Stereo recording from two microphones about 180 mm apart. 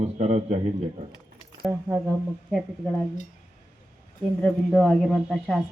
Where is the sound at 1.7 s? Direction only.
15° right (ahead or behind).